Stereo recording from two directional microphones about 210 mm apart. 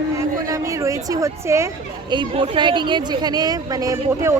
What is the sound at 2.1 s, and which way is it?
A woman's voice, 20° right (ahead or behind).